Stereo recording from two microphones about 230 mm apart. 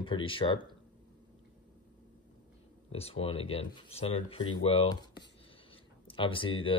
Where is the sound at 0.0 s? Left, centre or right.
Left.